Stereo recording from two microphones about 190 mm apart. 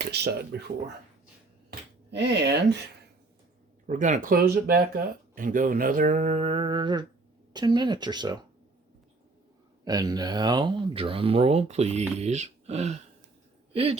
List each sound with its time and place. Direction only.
0.5 s speech: 60° right (ahead or behind)
2.0 s speech: 65° right (ahead or behind)
3.8 s speech: 40° right (ahead or behind); by 8.4 s 20° right (ahead or behind)
9.8 s speech: 20° right (ahead or behind); by 13.0 s 35° right (ahead or behind)